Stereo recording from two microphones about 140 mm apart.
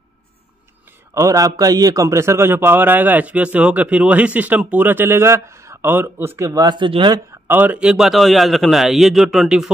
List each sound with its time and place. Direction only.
1.1 s a man's voice: 25° right (ahead or behind)
7.4 s a man's voice: 15° right (ahead or behind)